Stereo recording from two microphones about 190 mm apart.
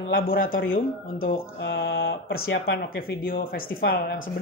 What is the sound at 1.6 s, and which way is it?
Mantra, 70° left (ahead or behind).